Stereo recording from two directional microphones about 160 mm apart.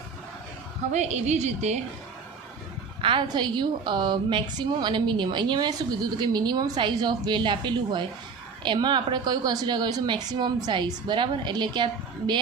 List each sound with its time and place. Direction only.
0.9 s a woman's voice: 45° right (ahead or behind)
3.0 s a woman's voice: 30° right (ahead or behind)